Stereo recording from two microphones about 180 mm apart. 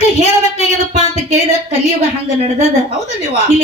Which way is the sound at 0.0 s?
40° left (ahead or behind).